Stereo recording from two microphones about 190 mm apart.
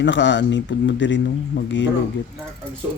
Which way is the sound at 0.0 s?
70° left (ahead or behind).